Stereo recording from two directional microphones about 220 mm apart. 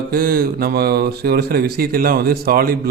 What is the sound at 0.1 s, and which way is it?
Speech, 40° right (ahead or behind).